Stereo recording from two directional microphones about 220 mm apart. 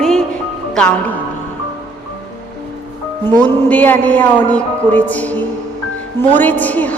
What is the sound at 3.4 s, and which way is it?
A man's voice, 5° left (ahead or behind).